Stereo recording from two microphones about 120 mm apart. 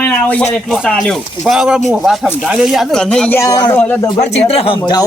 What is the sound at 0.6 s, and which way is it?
Speech, centre (ahead or behind).